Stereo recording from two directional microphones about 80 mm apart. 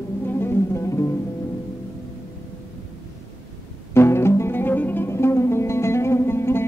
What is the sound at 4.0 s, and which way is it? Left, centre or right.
Music, left.